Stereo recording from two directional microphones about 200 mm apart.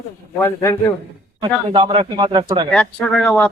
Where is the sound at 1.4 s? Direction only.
25° right (ahead or behind).